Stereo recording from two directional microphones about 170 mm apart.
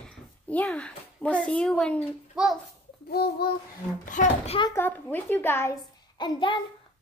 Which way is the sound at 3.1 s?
65° left (ahead or behind).